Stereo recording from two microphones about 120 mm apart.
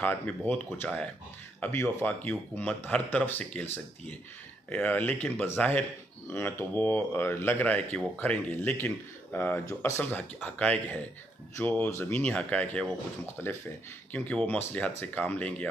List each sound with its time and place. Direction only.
0.0 s speech: 15° left (ahead or behind)